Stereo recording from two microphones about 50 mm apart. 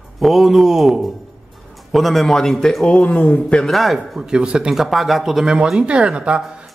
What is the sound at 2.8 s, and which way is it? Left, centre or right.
Speech, left.